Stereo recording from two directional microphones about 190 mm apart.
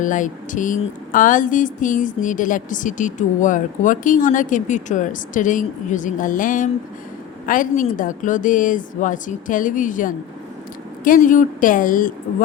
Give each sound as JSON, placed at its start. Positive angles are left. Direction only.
{"t": 0.0, "sound": "a woman's voice", "side_deg": 45}